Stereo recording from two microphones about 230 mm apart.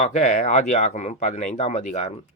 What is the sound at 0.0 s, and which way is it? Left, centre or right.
A man's voice, left.